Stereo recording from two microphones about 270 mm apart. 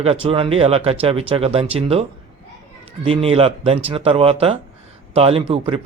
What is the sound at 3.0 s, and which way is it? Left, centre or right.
Speech, right.